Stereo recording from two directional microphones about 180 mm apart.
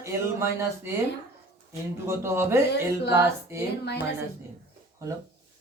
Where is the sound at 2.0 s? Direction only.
15° right (ahead or behind).